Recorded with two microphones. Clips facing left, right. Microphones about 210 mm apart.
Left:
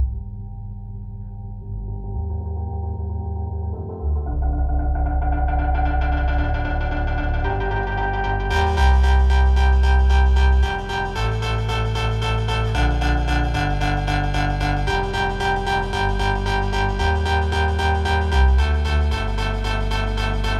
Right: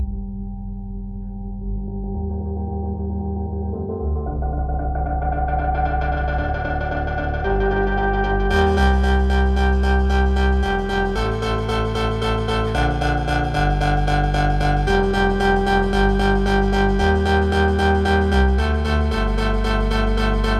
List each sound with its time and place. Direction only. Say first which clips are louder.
7.2 s music: right 8 dB; 50° right (ahead or behind)